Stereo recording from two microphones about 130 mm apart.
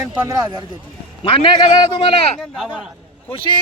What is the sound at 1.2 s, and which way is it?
Speech, 40° left (ahead or behind).